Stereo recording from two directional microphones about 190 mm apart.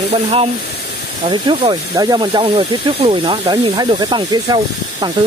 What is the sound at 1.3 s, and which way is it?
Speech, 25° right (ahead or behind).